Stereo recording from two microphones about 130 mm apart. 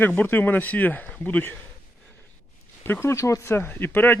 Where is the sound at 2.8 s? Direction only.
20° left (ahead or behind).